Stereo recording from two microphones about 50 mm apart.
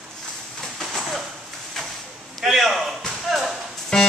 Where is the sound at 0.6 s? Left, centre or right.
Centre.